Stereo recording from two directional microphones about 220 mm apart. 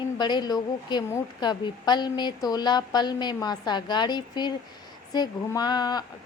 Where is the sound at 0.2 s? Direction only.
20° left (ahead or behind).